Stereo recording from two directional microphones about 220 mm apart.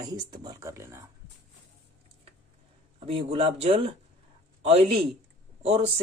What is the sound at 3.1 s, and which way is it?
A man's voice, 25° right (ahead or behind).